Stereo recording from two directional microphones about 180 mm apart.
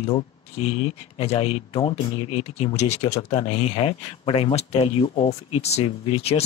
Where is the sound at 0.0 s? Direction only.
35° left (ahead or behind).